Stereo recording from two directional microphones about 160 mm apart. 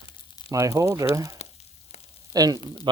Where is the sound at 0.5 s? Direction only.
20° right (ahead or behind).